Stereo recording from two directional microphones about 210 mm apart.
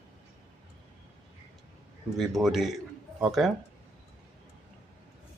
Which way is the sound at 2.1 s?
Centre (ahead or behind).